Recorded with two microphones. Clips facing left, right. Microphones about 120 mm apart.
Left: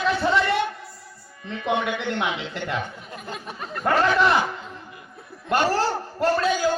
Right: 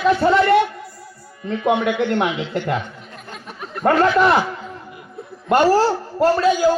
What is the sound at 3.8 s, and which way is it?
Speech, 45° right (ahead or behind).